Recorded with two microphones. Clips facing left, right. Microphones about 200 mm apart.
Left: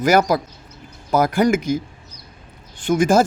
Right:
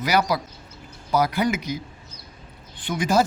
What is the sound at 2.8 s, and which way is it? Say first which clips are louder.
Speech: left 6 dB; 50° left (ahead or behind).